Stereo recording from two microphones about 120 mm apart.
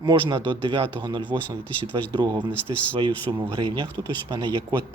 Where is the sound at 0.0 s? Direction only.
35° right (ahead or behind).